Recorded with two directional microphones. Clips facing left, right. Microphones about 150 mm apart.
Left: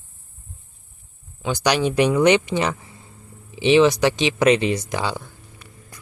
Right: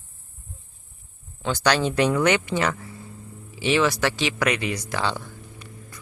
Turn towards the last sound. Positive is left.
turn(degrees=15)  # may be behind; listen again after turning